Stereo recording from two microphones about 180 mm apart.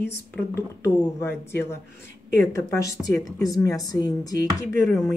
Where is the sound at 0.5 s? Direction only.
15° left (ahead or behind).